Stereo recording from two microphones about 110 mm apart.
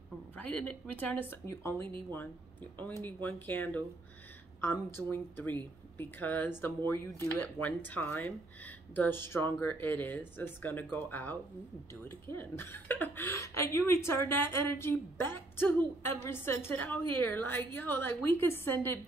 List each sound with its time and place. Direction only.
0.4 s speech: 10° left (ahead or behind)
3.0 s speech: 15° left (ahead or behind)